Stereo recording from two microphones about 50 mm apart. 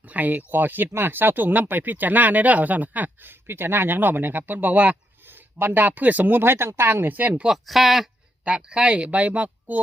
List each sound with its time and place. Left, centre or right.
0.1 s speech: right
3.4 s speech: right
5.3 s speech: right
7.4 s speech: centre
8.4 s speech: centre